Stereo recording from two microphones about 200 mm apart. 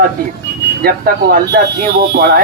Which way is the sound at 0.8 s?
50° right (ahead or behind).